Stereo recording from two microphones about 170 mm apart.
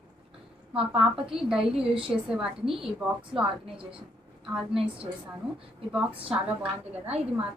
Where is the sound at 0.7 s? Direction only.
5° right (ahead or behind).